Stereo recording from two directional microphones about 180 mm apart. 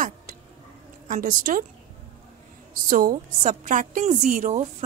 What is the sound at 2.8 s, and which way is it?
A woman's voice, 50° right (ahead or behind).